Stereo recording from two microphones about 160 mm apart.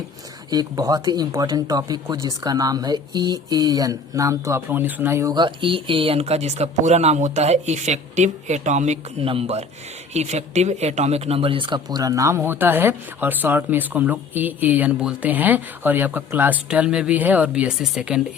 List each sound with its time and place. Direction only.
0.5 s speech: 25° right (ahead or behind); by 18.2 s 5° right (ahead or behind)